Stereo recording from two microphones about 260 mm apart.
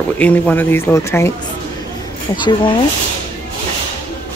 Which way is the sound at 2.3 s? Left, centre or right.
Centre.